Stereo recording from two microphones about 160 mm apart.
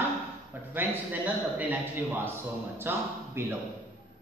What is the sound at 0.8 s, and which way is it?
Speech, 10° right (ahead or behind).